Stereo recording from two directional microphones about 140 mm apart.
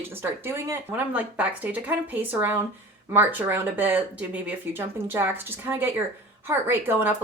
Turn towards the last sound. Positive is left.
turn(degrees=-15)  # may be behind; listen again after turning